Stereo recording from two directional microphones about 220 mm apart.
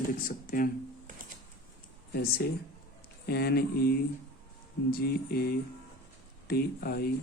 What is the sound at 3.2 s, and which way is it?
Speech, 45° left (ahead or behind).